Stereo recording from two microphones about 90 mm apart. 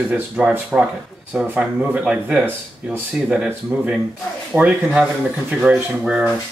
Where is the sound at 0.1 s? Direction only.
10° right (ahead or behind).